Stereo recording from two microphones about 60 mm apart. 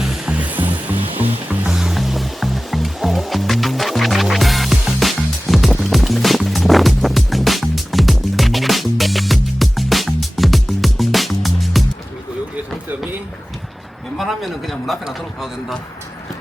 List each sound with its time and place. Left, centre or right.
0.3 s music: right
1.7 s music: centre
14.2 s a sound: centre